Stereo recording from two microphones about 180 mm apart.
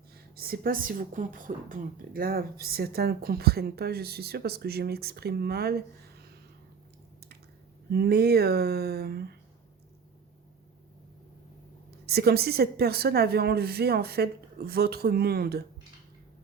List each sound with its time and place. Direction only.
0.3 s speech: 55° right (ahead or behind)
7.9 s speech: 60° right (ahead or behind)
11.9 s speech: 65° right (ahead or behind)